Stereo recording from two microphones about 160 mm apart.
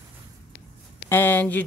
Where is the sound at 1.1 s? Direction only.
15° left (ahead or behind).